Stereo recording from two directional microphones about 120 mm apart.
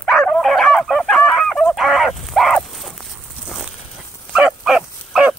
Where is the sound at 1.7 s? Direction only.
Centre (ahead or behind).